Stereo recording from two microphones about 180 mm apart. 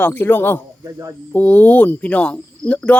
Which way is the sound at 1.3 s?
10° left (ahead or behind).